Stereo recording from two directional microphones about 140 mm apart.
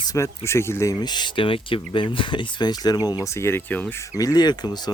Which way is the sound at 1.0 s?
30° left (ahead or behind).